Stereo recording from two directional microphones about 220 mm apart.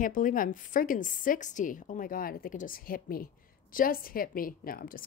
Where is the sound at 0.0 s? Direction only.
35° left (ahead or behind).